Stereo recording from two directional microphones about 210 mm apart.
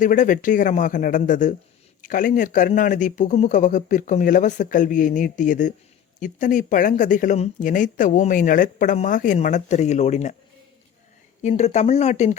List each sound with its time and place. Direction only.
0.0 s speech: 40° left (ahead or behind)
11.4 s speech: 30° left (ahead or behind)